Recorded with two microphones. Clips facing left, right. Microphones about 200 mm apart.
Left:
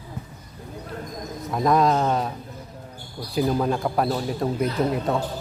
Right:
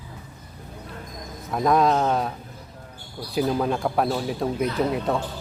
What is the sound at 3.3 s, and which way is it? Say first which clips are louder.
Speech: left 1 dB; centre (ahead or behind).